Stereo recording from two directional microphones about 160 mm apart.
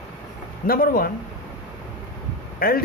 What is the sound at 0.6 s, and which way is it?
Speech, 65° left (ahead or behind).